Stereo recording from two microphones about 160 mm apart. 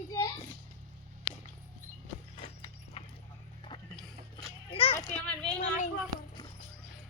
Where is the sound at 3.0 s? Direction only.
35° left (ahead or behind).